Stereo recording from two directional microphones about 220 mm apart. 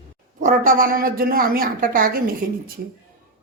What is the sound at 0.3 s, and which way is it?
A woman's voice, 40° right (ahead or behind).